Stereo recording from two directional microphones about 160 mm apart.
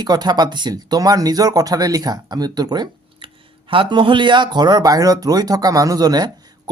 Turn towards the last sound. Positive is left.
turn(degrees=-25)  # may be behind; listen again after turning